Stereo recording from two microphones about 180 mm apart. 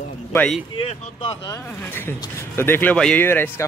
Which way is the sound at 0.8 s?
30° left (ahead or behind).